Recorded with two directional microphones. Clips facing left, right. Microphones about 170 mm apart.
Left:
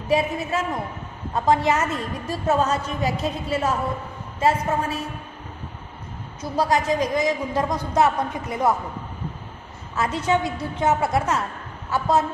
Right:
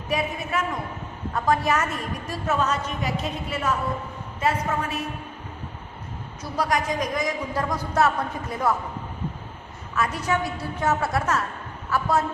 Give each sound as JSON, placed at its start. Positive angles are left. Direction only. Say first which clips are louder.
{"t": 0.1, "sound": "a woman's voice", "louder": "left 5 dB", "side_deg": 25}
{"t": 6.5, "sound": "a woman's voice", "louder": "left 4 dB", "side_deg": 25}
{"t": 9.9, "sound": "a woman's voice", "louder": "left 3 dB", "side_deg": 25}